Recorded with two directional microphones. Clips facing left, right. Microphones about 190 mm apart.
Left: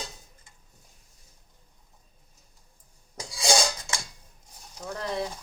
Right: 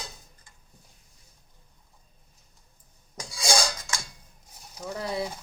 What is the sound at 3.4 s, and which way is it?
Dishes, 25° left (ahead or behind).